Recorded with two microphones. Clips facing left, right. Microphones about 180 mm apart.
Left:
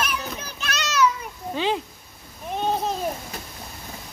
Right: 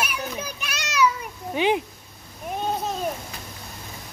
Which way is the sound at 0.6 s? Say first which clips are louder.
Left 1 dB; 10° right (ahead or behind).